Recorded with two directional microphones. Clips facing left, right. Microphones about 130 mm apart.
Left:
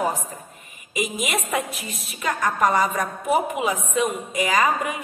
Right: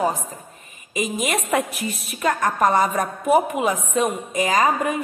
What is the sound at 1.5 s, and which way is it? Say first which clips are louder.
A woman's voice: right 4 dB; 55° right (ahead or behind).